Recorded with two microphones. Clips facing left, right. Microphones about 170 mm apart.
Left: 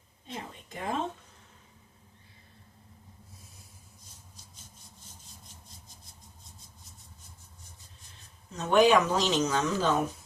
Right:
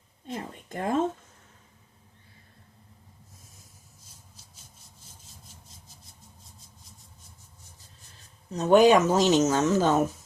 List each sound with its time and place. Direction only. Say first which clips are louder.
0.3 s speech: right 5 dB; 45° right (ahead or behind)
8.5 s speech: right 4 dB; 40° right (ahead or behind)